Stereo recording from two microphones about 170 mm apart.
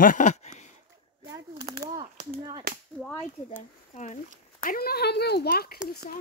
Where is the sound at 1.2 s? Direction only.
20° right (ahead or behind).